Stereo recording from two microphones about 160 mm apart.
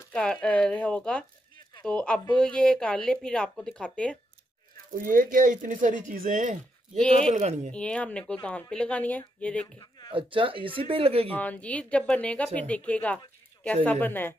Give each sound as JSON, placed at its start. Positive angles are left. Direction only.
{"t": 0.1, "sound": "speech", "side_deg": 5}
{"t": 4.9, "sound": "speech", "side_deg": -55}
{"t": 7.0, "sound": "speech", "side_deg": 5}
{"t": 7.3, "sound": "speech", "side_deg": -45}
{"t": 7.7, "sound": "speech", "side_deg": 5}
{"t": 10.1, "sound": "speech", "side_deg": -35}
{"t": 11.2, "sound": "speech", "side_deg": 10}